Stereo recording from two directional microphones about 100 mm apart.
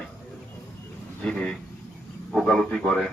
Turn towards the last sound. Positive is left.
turn(degrees=5)  # may be behind; listen again after turning